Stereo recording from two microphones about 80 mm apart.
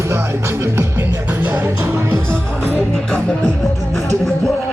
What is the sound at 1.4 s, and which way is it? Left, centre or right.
Music, right.